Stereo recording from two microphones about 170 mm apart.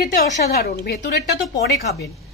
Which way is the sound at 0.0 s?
65° left (ahead or behind).